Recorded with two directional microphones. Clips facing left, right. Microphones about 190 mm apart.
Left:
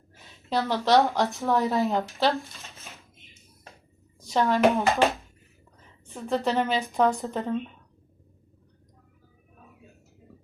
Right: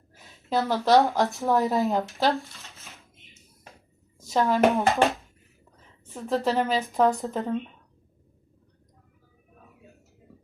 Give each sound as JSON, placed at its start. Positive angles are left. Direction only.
{"t": 0.1, "sound": "a woman's voice", "side_deg": -5}
{"t": 2.6, "sound": "a sound", "side_deg": 15}
{"t": 4.3, "sound": "a woman's voice", "side_deg": -5}
{"t": 6.1, "sound": "a woman's voice", "side_deg": -5}